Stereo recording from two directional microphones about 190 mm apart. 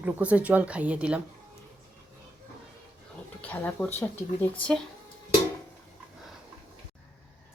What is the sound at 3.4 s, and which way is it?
Speech, 10° left (ahead or behind).